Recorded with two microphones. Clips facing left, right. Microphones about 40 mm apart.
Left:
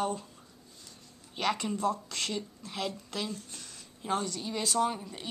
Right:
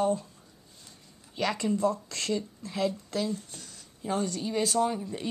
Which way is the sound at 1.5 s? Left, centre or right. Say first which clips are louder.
Right 2 dB; left.